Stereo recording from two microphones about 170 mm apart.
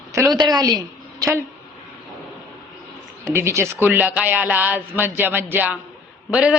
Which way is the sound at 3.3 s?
15° right (ahead or behind).